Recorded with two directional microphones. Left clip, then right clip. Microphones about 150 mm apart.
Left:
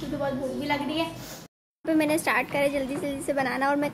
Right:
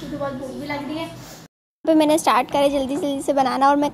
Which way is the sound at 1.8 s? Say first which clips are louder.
Right 8 dB; 40° right (ahead or behind).